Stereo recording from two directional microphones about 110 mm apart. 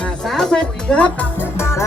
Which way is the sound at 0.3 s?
5° left (ahead or behind).